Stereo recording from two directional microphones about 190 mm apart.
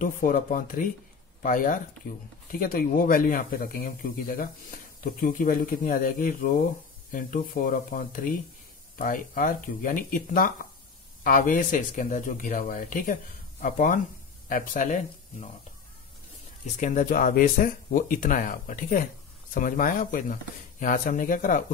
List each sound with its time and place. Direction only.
0.0 s speech: 45° left (ahead or behind)
16.6 s speech: 40° left (ahead or behind)